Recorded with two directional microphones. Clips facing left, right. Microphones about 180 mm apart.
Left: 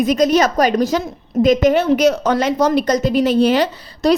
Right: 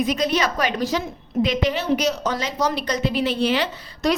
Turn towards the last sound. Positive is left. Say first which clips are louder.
# left 7 dB
turn(degrees=40)  # may be behind; listen again after turning